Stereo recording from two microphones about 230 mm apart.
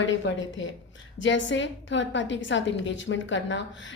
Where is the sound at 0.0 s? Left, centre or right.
Left.